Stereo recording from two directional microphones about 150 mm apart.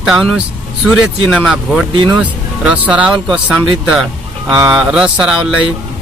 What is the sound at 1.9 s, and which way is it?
Speech, 30° right (ahead or behind).